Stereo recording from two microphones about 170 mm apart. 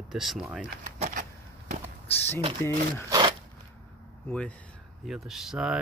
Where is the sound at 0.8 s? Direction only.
45° right (ahead or behind).